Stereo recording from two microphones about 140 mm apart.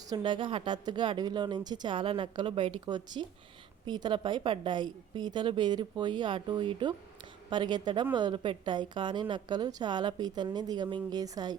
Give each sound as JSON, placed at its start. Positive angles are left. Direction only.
{"t": 0.2, "sound": "a woman's voice", "side_deg": -35}